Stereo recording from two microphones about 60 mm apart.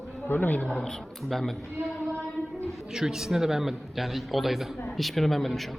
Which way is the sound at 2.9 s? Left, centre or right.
Centre.